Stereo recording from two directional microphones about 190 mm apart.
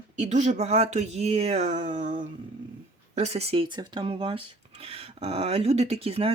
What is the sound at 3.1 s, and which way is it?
Speech, 35° right (ahead or behind).